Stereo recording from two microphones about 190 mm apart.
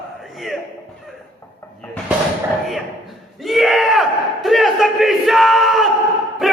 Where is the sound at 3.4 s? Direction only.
Centre (ahead or behind).